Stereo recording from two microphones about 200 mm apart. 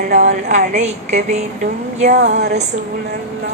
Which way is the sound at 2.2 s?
55° right (ahead or behind).